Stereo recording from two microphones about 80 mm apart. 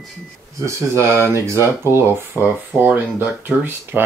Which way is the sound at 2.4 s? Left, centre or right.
Right.